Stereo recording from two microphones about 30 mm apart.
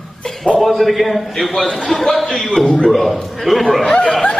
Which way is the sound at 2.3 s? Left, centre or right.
Centre.